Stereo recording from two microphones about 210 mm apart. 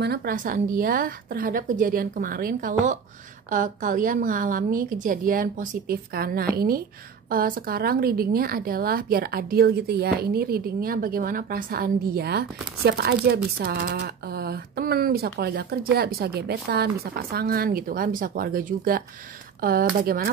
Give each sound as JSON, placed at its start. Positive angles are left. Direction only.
{"t": 0.0, "sound": "a woman's voice", "side_deg": -45}